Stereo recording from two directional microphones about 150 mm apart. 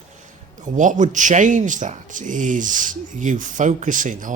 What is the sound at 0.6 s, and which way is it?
Speech, 55° right (ahead or behind).